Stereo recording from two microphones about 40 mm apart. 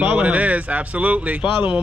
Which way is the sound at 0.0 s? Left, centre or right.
Right.